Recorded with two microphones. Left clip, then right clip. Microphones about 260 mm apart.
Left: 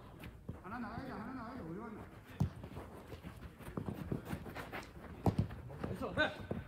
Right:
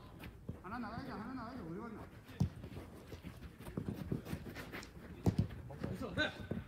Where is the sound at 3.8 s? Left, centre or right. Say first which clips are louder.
Left 1 dB; left.